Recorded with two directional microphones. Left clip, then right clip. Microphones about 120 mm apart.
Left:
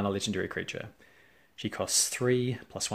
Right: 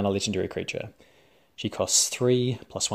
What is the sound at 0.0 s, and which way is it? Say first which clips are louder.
Speech: right 5 dB; 35° right (ahead or behind).